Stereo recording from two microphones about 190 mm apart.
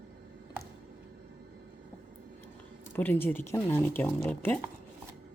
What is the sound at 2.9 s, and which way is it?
Speech, 10° left (ahead or behind).